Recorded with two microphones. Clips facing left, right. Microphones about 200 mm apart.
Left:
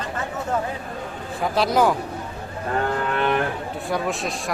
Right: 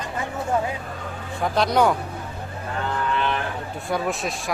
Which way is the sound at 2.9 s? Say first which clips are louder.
Even; 55° left (ahead or behind).